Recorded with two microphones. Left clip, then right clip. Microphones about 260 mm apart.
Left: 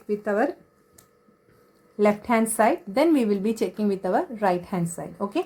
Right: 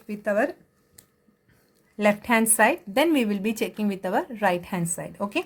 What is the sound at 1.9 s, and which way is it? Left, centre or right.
Speech, right.